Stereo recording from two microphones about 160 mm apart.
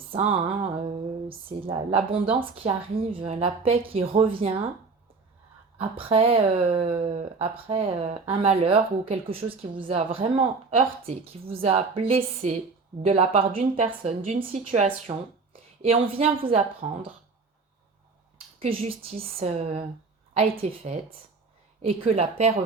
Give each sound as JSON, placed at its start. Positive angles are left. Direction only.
{"t": 0.1, "sound": "a sound", "side_deg": -40}
{"t": 1.3, "sound": "speech", "side_deg": -35}
{"t": 6.0, "sound": "speech", "side_deg": -35}
{"t": 18.6, "sound": "speech", "side_deg": -35}